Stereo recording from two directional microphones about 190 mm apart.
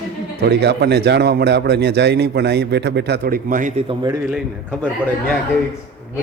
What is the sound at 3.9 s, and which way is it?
Speech, 20° right (ahead or behind).